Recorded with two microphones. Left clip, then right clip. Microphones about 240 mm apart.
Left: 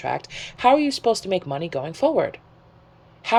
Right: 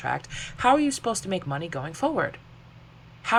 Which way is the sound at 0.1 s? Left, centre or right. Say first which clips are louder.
Left 2 dB; centre.